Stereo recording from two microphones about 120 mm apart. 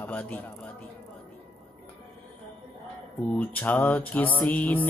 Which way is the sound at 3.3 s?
10° left (ahead or behind).